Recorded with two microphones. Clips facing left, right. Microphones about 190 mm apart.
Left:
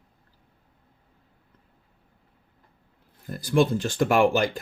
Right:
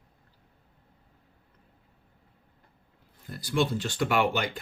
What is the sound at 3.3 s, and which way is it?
Speech, 50° left (ahead or behind).